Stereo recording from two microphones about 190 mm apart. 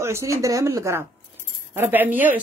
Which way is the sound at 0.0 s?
15° right (ahead or behind).